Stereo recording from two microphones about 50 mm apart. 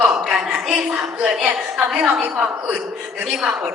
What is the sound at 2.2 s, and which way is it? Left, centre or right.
Speech, right.